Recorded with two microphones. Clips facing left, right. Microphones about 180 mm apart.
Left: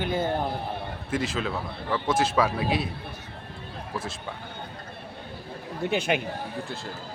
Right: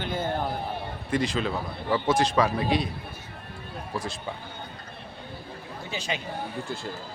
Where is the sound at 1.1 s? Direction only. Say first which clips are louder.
Right 2 dB; 5° left (ahead or behind).